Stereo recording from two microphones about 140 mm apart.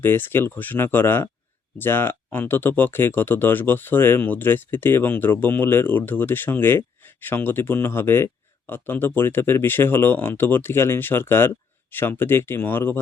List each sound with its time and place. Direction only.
0.0 s speech: 15° left (ahead or behind)